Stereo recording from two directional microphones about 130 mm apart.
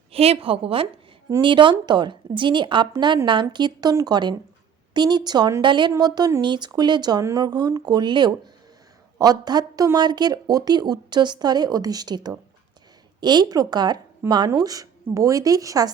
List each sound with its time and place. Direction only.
0.1 s a woman's voice: 50° right (ahead or behind); by 15.9 s 25° right (ahead or behind)